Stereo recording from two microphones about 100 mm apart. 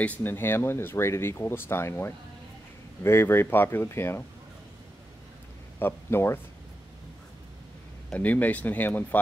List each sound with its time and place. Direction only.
0.0 s speech: 20° left (ahead or behind)
5.8 s speech: 20° left (ahead or behind)
8.1 s speech: 15° left (ahead or behind)